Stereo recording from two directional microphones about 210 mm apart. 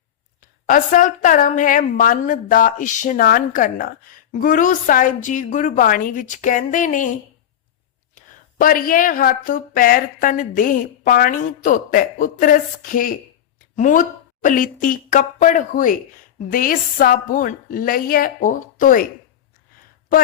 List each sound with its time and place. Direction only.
0.3 s a woman's voice: 40° left (ahead or behind)
8.1 s a woman's voice: 40° left (ahead or behind)